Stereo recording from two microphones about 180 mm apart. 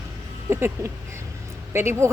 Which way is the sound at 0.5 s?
15° right (ahead or behind).